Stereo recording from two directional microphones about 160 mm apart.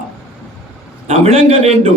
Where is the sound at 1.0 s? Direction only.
40° right (ahead or behind).